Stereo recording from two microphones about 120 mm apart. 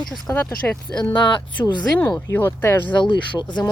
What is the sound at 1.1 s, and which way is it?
Speech, 40° left (ahead or behind).